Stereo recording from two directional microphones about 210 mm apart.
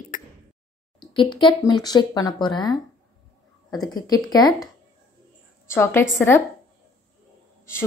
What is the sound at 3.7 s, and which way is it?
A woman's voice, 20° left (ahead or behind).